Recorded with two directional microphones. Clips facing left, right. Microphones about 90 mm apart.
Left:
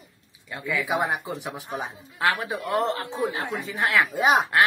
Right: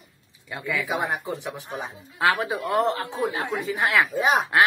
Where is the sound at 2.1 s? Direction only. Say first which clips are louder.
Right 2 dB; 20° right (ahead or behind).